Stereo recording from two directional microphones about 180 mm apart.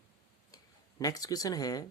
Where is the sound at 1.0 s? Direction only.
20° left (ahead or behind).